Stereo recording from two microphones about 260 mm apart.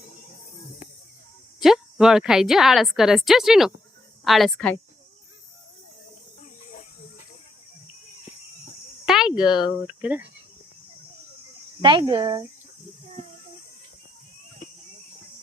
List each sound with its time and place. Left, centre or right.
1.6 s a woman's voice: centre
9.0 s a sound: centre
9.5 s speech: centre
9.8 s a woman's voice: centre
11.8 s speech: centre